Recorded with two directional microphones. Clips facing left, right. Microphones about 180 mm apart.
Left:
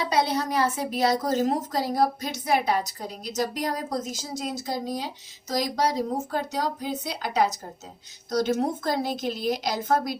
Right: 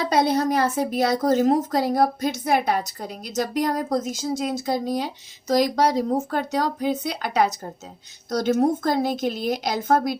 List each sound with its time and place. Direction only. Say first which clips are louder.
0.0 s a woman's voice: right 4 dB; 50° right (ahead or behind)